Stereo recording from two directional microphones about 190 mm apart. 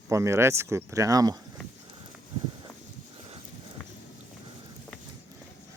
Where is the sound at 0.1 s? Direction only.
15° right (ahead or behind).